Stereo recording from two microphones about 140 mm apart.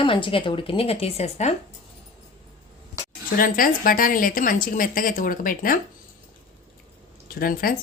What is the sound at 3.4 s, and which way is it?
Speech, 90° left.